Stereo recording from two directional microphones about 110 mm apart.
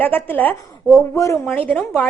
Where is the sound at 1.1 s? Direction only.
30° left (ahead or behind).